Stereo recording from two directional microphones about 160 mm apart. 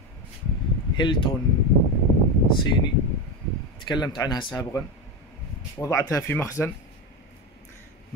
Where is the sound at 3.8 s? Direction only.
25° left (ahead or behind).